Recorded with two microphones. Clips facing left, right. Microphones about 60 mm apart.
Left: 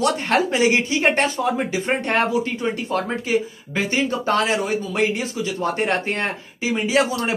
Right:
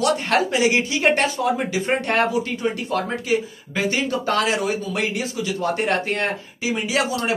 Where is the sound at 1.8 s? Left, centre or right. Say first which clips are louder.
Right 1 dB; centre.